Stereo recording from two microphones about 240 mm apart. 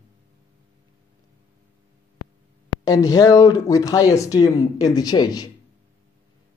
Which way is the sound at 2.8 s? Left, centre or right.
Centre.